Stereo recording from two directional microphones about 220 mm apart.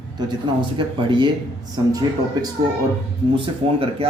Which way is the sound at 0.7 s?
20° right (ahead or behind).